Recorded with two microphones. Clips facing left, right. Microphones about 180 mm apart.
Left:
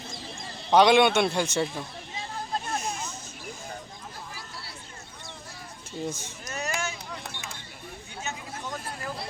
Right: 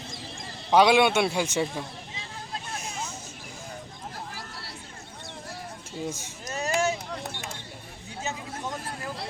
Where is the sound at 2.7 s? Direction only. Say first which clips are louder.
Left 6 dB; 45° left (ahead or behind).